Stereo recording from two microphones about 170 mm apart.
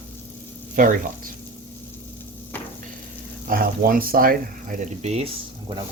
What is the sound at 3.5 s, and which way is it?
Speech, 55° right (ahead or behind).